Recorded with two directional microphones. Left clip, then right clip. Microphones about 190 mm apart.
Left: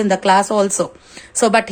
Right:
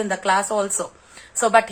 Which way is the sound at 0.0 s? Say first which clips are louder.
Left 6 dB; 40° left (ahead or behind).